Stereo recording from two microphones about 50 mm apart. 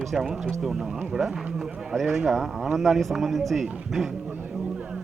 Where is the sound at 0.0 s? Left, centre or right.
Centre.